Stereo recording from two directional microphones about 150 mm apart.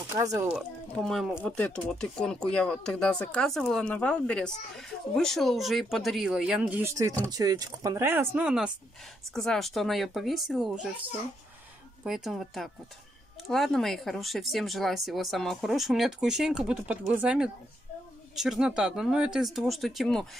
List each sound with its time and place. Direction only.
0.2 s speech: 20° right (ahead or behind)
0.6 s speech: centre (ahead or behind)
7.2 s speech: 25° right (ahead or behind); by 10.9 s centre (ahead or behind)
12.0 s speech: centre (ahead or behind)